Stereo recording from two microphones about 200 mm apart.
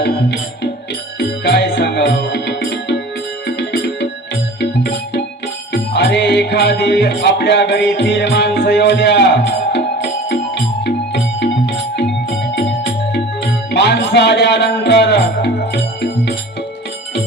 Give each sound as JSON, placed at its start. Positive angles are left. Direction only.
{"t": 0.0, "sound": "music", "side_deg": 55}
{"t": 13.1, "sound": "music", "side_deg": 55}